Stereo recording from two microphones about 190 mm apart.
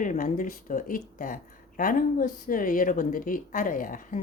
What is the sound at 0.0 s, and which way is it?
Speech, 45° left (ahead or behind).